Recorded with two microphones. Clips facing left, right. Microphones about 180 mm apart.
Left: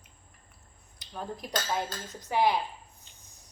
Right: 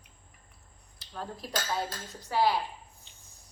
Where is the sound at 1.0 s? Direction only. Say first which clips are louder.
Left 1 dB; 15° left (ahead or behind).